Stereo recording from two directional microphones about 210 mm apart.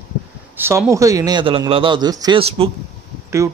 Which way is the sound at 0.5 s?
10° right (ahead or behind).